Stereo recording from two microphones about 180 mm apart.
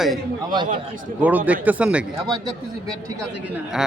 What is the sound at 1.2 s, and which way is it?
Speech, 10° right (ahead or behind).